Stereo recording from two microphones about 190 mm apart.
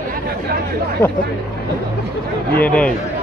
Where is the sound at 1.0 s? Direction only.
15° left (ahead or behind).